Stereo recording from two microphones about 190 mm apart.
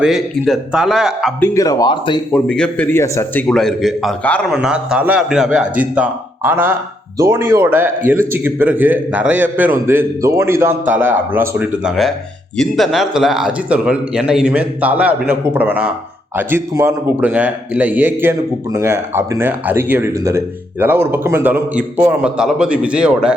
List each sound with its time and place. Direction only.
0.0 s speech: centre (ahead or behind)
1.4 s speech: 20° left (ahead or behind)
2.3 s speech: 5° left (ahead or behind)
3.5 s a man's voice: centre (ahead or behind)